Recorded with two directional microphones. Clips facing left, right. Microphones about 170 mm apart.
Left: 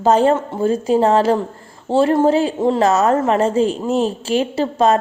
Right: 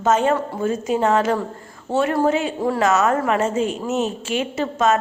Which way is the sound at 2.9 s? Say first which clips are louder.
Left 3 dB; 35° left (ahead or behind).